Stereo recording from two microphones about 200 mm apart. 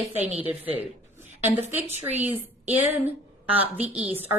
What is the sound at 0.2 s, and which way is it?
Speech, 35° right (ahead or behind).